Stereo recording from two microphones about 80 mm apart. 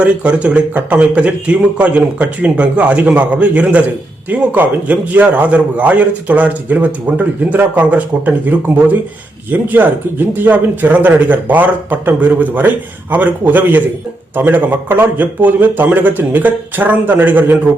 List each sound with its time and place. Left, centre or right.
0.0 s a man's voice: centre